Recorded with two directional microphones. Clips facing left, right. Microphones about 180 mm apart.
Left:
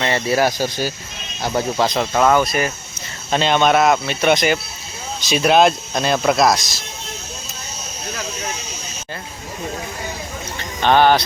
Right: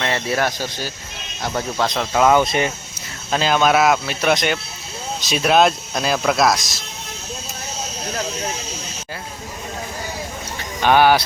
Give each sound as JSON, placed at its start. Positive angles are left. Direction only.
{"t": 0.0, "sound": "speech", "side_deg": 0}
{"t": 2.2, "sound": "speech", "side_deg": -20}
{"t": 3.3, "sound": "speech", "side_deg": 0}
{"t": 10.6, "sound": "a sound", "side_deg": -10}